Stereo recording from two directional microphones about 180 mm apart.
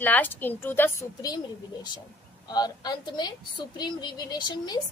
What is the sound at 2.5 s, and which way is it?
A woman's voice, 25° left (ahead or behind).